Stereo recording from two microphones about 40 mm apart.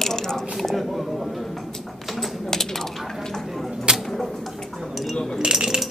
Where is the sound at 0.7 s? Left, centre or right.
Centre.